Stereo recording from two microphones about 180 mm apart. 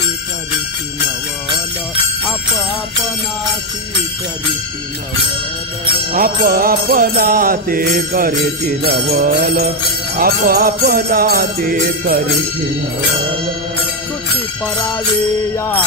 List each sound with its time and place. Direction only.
6.1 s mantra: 55° right (ahead or behind)
9.1 s jingle bell: 55° right (ahead or behind)